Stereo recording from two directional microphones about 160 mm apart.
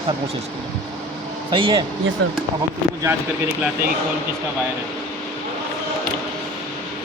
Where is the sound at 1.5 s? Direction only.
30° right (ahead or behind).